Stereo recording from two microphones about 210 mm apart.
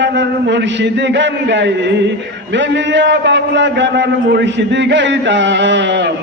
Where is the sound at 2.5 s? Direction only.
55° right (ahead or behind).